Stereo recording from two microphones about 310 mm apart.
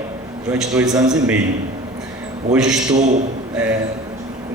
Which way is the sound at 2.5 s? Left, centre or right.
Centre.